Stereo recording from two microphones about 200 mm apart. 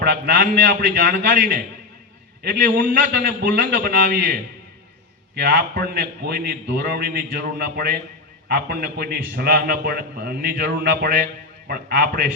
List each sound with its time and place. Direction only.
0.0 s a man's voice: 50° right (ahead or behind)
5.3 s a man's voice: 50° right (ahead or behind)